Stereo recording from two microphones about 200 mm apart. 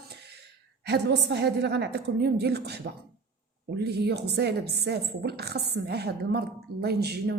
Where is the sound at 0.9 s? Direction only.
55° right (ahead or behind).